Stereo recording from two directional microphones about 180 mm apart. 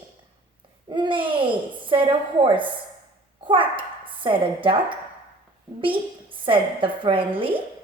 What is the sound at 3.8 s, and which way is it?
Speech, 30° right (ahead or behind).